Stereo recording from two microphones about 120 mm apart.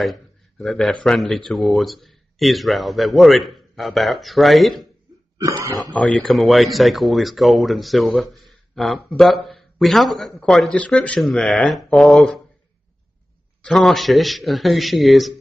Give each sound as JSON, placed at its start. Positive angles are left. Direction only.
{"t": 0.0, "sound": "a sound", "side_deg": 0}
{"t": 1.0, "sound": "speech", "side_deg": 5}
{"t": 5.4, "sound": "speech", "side_deg": -30}
{"t": 5.9, "sound": "speech", "side_deg": 5}
{"t": 13.6, "sound": "speech", "side_deg": 5}